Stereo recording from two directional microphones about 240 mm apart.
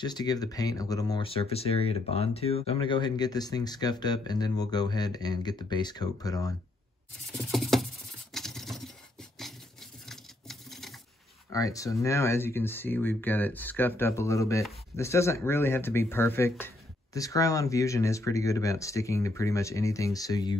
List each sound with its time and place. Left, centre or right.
0.0 s speech: centre
7.2 s a sound: centre
10.0 s patter: centre
11.5 s speech: centre